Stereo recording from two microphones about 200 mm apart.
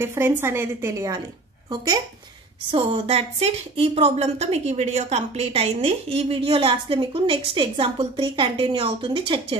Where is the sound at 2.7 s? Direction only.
30° right (ahead or behind).